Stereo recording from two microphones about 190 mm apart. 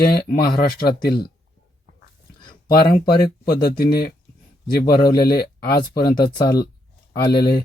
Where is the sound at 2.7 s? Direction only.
55° left (ahead or behind).